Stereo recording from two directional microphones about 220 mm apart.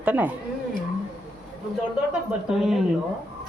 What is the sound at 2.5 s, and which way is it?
Speech, centre (ahead or behind).